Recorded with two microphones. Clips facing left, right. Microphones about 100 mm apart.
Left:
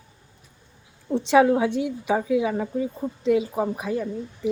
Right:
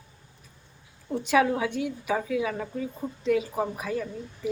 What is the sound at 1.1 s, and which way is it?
A woman's voice, 25° left (ahead or behind).